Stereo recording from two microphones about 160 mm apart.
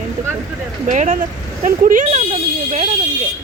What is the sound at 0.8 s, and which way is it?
Speech, 50° right (ahead or behind).